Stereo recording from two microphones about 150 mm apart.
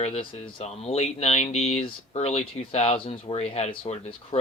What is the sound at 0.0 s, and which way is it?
Speech, 40° left (ahead or behind).